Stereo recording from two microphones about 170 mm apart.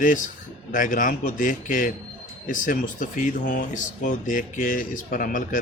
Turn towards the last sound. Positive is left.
turn(degrees=55)  # may be behind; listen again after turning